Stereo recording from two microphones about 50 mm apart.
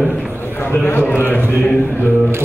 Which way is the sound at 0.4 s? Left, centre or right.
Left.